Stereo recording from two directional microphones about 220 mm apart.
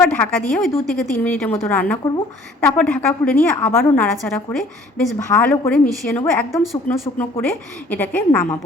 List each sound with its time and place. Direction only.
0.0 s a woman's voice: 5° left (ahead or behind)